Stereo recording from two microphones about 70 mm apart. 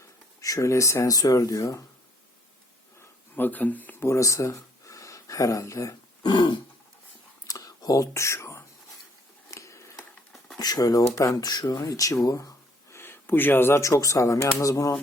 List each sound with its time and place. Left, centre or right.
0.0 s speech: left
3.0 s a sound: left
4.0 s speech: left
6.2 s throat clearing: left
7.4 s a sound: left
8.1 s speech: left
9.5 s a sound: left
10.6 s speech: left
11.0 s speech: left
13.0 s speech: left
13.8 s speech: left